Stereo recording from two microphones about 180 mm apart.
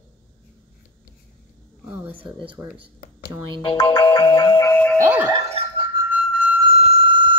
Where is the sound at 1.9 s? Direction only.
10° right (ahead or behind).